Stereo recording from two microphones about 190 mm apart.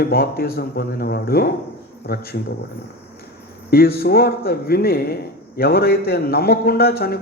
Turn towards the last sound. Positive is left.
turn(degrees=55)  # may be behind; listen again after turning